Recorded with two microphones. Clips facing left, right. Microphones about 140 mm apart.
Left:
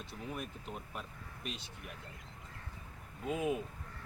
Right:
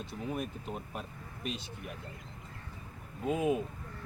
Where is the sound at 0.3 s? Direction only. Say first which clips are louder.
Right 6 dB; 40° right (ahead or behind).